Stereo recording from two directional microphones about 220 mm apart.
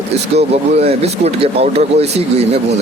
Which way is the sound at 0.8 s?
30° right (ahead or behind).